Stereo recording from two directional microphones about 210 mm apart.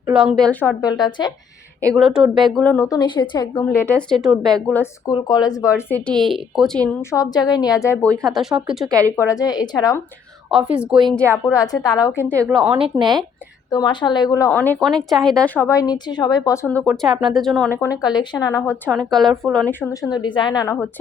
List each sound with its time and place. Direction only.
0.0 s speech: 5° right (ahead or behind); by 1.3 s 20° left (ahead or behind)
2.0 s speech: centre (ahead or behind)
7.0 s speech: 15° left (ahead or behind); by 8.9 s centre (ahead or behind)
8.9 s a woman's voice: 15° right (ahead or behind)
9.1 s speech: 15° left (ahead or behind)
10.5 s speech: 5° right (ahead or behind)
11.5 s speech: 20° left (ahead or behind)
12.5 s speech: 5° right (ahead or behind)
12.8 s speech: 20° right (ahead or behind)
13.7 s speech: 20° left (ahead or behind); by 15.5 s 5° left (ahead or behind)
15.6 s speech: 15° left (ahead or behind)
18.0 s speech: 20° left (ahead or behind)
18.9 s speech: centre (ahead or behind)
19.8 s a woman's voice: 15° left (ahead or behind)